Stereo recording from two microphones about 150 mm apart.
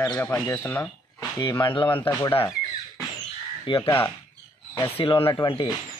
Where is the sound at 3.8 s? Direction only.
20° left (ahead or behind).